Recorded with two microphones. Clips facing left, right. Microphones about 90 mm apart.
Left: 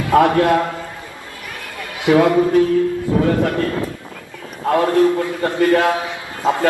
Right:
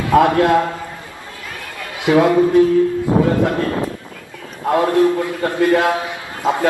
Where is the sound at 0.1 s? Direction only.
20° right (ahead or behind).